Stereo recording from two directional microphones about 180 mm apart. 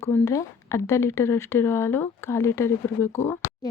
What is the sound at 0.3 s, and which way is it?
Speech, 15° left (ahead or behind).